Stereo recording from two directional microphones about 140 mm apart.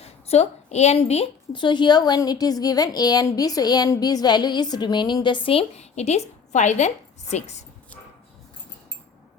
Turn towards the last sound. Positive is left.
turn(degrees=55)  # may be behind; listen again after turning